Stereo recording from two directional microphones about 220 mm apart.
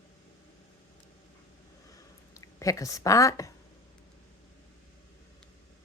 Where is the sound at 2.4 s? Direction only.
15° left (ahead or behind).